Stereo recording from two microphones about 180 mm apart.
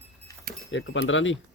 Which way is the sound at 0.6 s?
90° left.